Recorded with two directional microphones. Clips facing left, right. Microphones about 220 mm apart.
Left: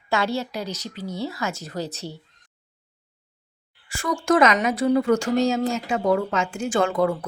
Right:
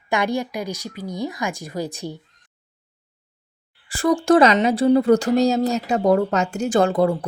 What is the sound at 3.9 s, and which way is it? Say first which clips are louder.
A woman's voice: right 5 dB; 35° right (ahead or behind).